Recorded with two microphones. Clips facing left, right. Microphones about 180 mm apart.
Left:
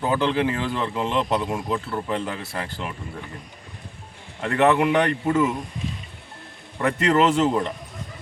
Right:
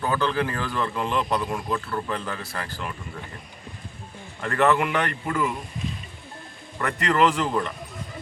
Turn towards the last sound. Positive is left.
turn(degrees=25)  # may be behind; listen again after turning